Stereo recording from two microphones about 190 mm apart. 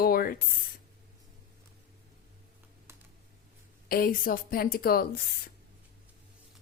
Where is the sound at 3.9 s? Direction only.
50° left (ahead or behind).